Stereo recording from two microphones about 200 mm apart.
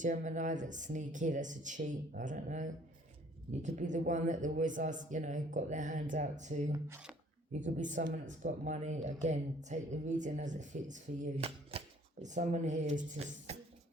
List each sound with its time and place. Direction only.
0.0 s a woman's voice: 40° right (ahead or behind)
6.7 s speech: 10° right (ahead or behind)
7.6 s a woman's voice: 40° right (ahead or behind)